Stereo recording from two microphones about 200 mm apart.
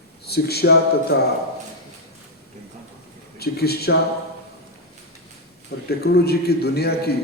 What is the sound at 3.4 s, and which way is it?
Speech, 50° left (ahead or behind).